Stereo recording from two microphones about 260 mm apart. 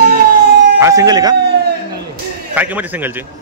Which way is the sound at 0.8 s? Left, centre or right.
Centre.